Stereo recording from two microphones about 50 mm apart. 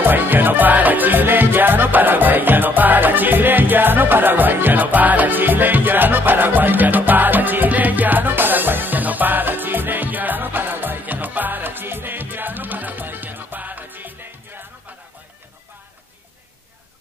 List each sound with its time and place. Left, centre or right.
0.0 s music: right